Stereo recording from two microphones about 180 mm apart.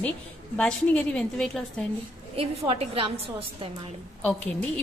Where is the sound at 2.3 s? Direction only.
30° right (ahead or behind).